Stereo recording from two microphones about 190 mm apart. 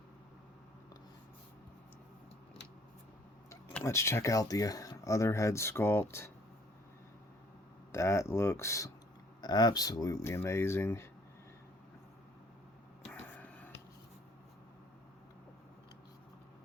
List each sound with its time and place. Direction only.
3.5 s speech: 10° left (ahead or behind)
7.9 s speech: 15° left (ahead or behind)
13.1 s a sound: 10° left (ahead or behind)